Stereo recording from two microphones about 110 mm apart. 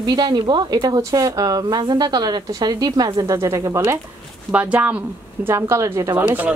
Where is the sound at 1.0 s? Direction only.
30° right (ahead or behind).